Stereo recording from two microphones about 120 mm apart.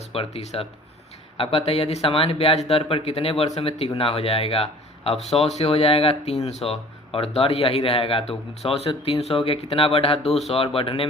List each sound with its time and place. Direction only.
0.1 s a man's voice: 55° left (ahead or behind)